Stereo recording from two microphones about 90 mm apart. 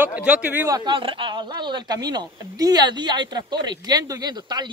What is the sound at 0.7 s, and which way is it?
Speech, 60° right (ahead or behind).